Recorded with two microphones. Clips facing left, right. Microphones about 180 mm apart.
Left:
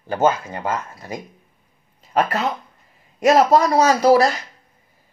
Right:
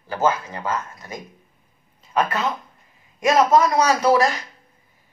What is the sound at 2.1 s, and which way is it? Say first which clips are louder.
A woman's voice: left 2 dB; 35° left (ahead or behind).